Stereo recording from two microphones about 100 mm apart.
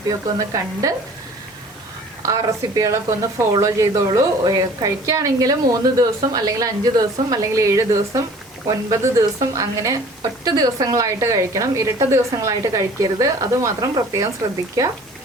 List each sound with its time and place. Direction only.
0.3 s a woman's voice: 35° right (ahead or behind)
2.2 s a woman's voice: 35° right (ahead or behind)